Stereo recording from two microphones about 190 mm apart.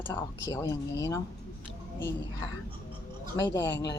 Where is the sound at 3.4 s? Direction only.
25° left (ahead or behind).